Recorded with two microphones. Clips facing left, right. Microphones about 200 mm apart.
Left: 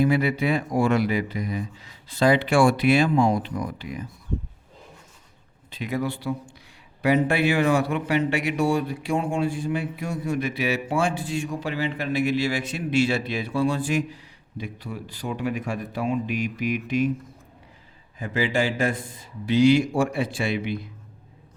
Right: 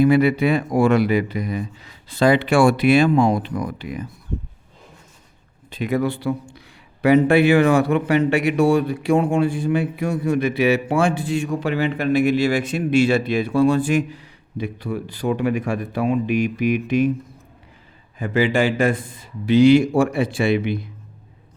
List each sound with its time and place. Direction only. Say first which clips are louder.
0.0 s a man's voice: right 6 dB; 65° right (ahead or behind)
5.7 s a man's voice: right 6 dB; 55° right (ahead or behind)
18.2 s a man's voice: right 6 dB; 65° right (ahead or behind)